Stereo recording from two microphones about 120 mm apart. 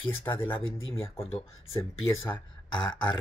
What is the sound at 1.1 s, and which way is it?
Speech, 50° left (ahead or behind).